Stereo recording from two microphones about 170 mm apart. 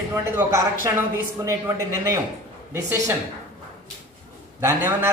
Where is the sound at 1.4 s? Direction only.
20° right (ahead or behind).